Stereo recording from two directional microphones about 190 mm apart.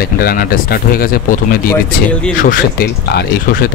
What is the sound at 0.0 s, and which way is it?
Speech, 50° left (ahead or behind).